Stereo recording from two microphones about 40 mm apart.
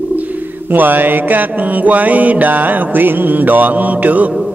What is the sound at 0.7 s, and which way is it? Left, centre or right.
Mantra, right.